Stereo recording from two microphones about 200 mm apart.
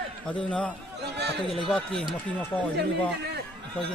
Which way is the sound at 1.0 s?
55° right (ahead or behind).